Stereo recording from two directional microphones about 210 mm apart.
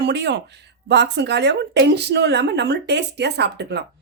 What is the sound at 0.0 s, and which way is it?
Speech, 55° right (ahead or behind).